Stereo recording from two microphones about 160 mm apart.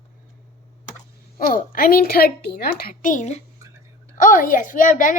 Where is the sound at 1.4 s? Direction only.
65° left (ahead or behind).